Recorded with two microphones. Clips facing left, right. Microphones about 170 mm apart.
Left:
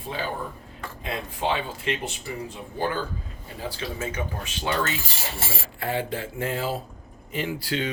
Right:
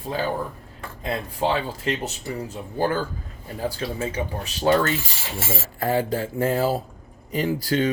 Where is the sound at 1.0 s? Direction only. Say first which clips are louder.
Right 4 dB; 40° right (ahead or behind).